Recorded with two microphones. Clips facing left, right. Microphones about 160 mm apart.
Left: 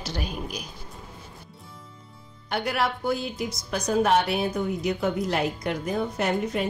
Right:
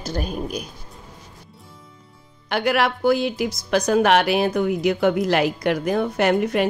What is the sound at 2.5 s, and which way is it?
A woman's voice, 90° right.